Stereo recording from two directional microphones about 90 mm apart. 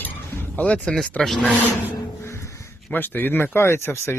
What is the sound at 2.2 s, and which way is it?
Music, 30° left (ahead or behind).